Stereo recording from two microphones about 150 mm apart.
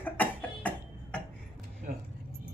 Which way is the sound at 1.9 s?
60° right (ahead or behind).